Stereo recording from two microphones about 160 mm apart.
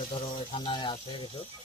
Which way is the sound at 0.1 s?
35° left (ahead or behind).